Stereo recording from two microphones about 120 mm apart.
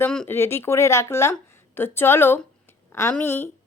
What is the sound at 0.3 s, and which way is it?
A woman's voice, 20° left (ahead or behind).